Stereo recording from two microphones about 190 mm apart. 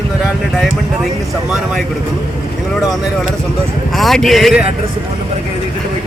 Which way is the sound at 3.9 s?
Centre (ahead or behind).